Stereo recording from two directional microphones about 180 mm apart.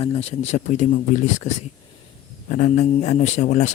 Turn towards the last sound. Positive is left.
turn(degrees=40)  # may be behind; listen again after turning